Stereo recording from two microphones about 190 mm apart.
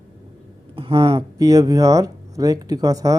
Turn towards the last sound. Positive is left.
turn(degrees=-20)  # may be behind; listen again after turning